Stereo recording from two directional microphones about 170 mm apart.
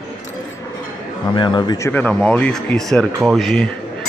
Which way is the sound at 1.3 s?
25° left (ahead or behind).